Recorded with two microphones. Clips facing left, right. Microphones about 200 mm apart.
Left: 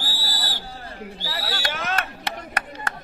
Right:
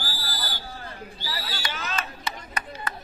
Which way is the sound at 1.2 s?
70° left (ahead or behind).